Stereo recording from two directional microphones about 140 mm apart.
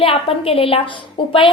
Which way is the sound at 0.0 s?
40° left (ahead or behind).